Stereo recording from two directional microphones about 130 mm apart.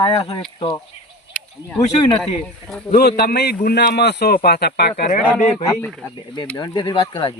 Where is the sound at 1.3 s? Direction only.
10° left (ahead or behind).